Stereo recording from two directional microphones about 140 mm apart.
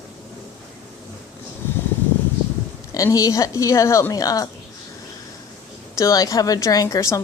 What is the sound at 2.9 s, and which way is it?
A woman's voice, 25° left (ahead or behind).